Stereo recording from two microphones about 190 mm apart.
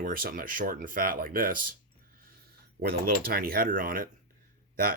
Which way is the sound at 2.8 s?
50° right (ahead or behind).